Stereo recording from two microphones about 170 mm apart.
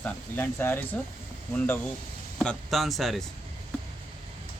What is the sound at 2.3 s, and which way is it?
Speech, centre (ahead or behind).